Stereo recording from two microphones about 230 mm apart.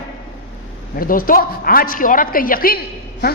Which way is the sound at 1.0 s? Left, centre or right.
Left.